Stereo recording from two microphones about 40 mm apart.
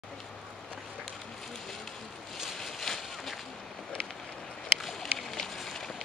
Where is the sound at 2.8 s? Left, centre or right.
Centre.